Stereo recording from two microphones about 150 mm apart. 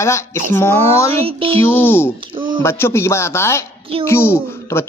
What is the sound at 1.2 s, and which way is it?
Speech, 40° right (ahead or behind).